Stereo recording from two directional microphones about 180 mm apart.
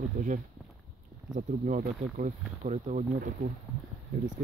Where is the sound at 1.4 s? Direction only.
45° right (ahead or behind).